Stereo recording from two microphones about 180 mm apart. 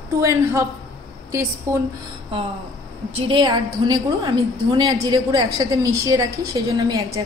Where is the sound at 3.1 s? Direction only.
30° right (ahead or behind).